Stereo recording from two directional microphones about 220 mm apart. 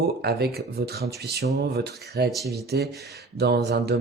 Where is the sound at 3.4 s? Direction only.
50° right (ahead or behind).